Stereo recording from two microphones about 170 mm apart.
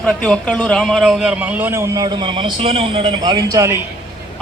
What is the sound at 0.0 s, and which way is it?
A man's voice, 5° left (ahead or behind).